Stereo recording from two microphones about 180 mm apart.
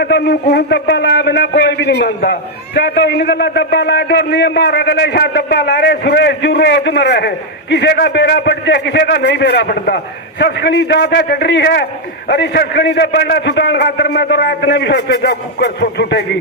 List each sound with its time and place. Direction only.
0.0 s a man's voice: 65° left (ahead or behind)